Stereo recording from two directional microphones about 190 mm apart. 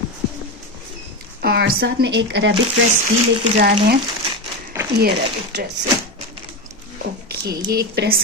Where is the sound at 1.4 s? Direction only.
55° right (ahead or behind).